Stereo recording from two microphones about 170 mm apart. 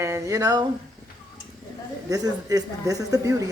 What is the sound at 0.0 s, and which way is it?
Speech, 15° right (ahead or behind).